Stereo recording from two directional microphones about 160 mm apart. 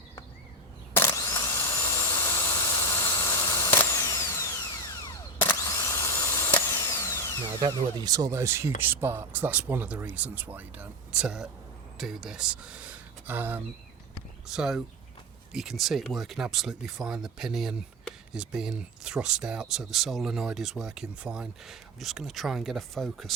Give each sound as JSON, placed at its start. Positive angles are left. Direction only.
{"t": 0.9, "sound": "a sound", "side_deg": 20}
{"t": 4.0, "sound": "drill", "side_deg": 20}
{"t": 7.4, "sound": "speech", "side_deg": -20}